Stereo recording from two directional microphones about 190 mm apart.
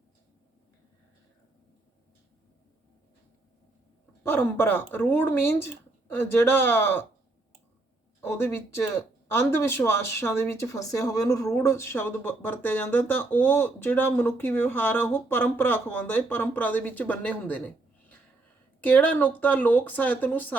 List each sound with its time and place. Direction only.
4.2 s speech: 10° left (ahead or behind)
8.2 s speech: 15° left (ahead or behind)
18.8 s speech: 10° left (ahead or behind)